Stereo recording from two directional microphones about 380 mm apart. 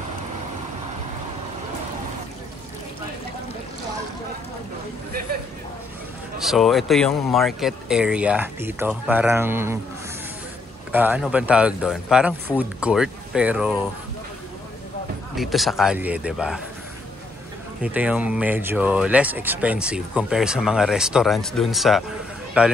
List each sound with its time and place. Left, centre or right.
6.4 s speech: centre
10.9 s speech: centre
15.3 s speech: centre
17.8 s speech: centre